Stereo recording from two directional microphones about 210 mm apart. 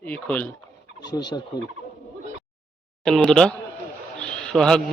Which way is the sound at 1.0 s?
20° left (ahead or behind).